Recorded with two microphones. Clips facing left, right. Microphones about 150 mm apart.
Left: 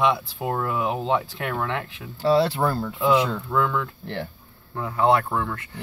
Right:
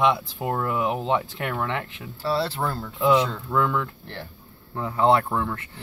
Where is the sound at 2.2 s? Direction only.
15° left (ahead or behind).